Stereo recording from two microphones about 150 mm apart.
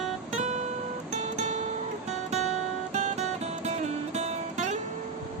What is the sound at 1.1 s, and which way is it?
Music, 50° right (ahead or behind).